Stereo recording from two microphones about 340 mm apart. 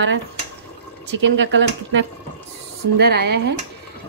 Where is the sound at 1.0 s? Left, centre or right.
Right.